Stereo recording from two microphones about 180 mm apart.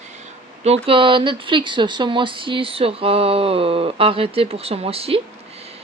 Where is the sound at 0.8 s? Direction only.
30° right (ahead or behind).